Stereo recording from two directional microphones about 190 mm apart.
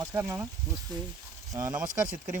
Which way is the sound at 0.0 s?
15° right (ahead or behind).